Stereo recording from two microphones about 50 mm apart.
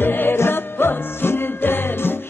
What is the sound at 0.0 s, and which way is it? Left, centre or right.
Music, left.